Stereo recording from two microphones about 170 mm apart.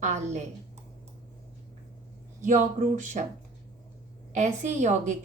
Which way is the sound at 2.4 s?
50° right (ahead or behind).